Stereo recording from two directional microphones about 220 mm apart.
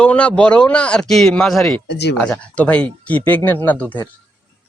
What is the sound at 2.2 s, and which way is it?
Speech, 5° left (ahead or behind).